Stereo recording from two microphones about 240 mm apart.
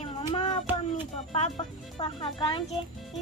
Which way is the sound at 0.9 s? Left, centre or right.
Left.